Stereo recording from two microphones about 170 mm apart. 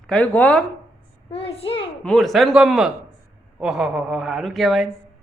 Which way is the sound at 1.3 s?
35° left (ahead or behind).